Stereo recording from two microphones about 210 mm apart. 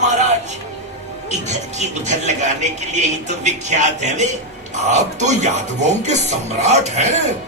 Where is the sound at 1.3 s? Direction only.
35° right (ahead or behind).